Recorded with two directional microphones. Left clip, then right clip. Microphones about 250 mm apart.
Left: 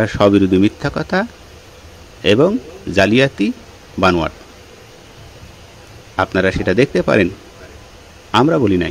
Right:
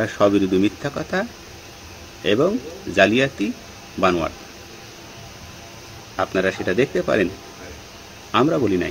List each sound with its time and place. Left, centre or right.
0.0 s speech: left
2.2 s speech: left
6.1 s speech: left
8.3 s speech: left